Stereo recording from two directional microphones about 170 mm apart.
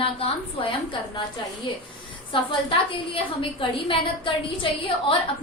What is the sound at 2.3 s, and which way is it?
A woman's voice, 30° left (ahead or behind).